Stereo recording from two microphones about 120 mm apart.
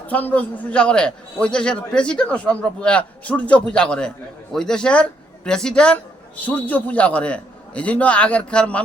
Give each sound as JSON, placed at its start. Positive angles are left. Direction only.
{"t": 0.1, "sound": "a man's voice", "side_deg": 15}